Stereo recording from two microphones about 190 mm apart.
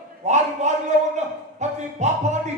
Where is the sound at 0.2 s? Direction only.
40° right (ahead or behind).